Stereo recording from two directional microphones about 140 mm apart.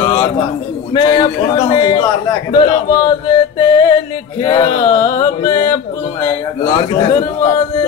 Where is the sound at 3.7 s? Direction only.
35° left (ahead or behind).